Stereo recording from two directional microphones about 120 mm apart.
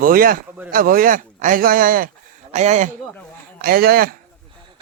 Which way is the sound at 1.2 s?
90° right.